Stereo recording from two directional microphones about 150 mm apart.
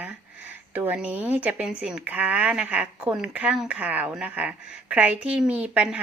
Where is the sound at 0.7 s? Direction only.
10° right (ahead or behind).